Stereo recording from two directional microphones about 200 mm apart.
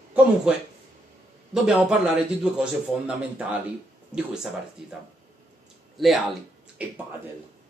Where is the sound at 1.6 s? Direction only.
5° right (ahead or behind).